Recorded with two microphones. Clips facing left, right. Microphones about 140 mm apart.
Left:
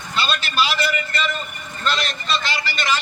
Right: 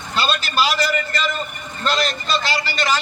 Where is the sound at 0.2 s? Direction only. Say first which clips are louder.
Right 2 dB; 40° right (ahead or behind).